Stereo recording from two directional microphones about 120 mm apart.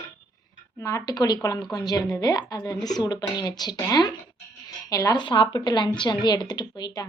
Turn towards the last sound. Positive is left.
turn(degrees=35)  # may be behind; listen again after turning